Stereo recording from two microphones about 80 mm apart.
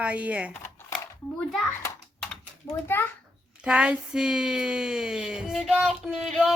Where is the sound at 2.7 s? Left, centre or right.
Left.